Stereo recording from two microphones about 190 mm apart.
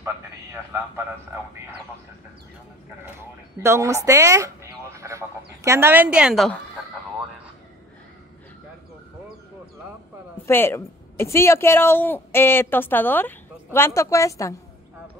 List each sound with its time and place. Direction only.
3.2 s a woman's voice: 15° right (ahead or behind)
10.4 s speech: 10° left (ahead or behind)